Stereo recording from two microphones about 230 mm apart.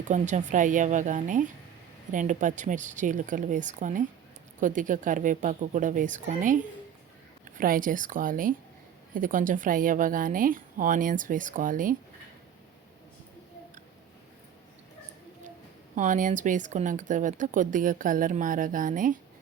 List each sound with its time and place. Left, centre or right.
0.1 s speech: right
16.0 s speech: right